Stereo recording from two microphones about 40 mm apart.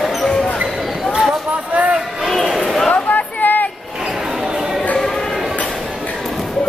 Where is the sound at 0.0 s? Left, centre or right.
Centre.